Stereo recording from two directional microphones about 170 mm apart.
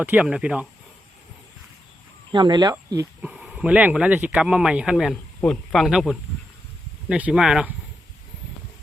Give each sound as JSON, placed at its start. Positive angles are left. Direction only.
{"t": 0.0, "sound": "speech", "side_deg": -10}
{"t": 2.3, "sound": "speech", "side_deg": -25}
{"t": 3.2, "sound": "speech", "side_deg": -5}